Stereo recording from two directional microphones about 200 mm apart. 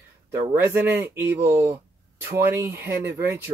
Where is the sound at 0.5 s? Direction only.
10° right (ahead or behind).